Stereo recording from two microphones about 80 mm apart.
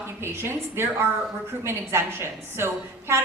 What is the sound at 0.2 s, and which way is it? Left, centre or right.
A woman's voice, right.